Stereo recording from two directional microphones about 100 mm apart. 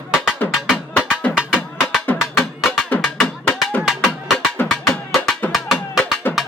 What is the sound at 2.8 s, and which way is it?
Music, 15° left (ahead or behind).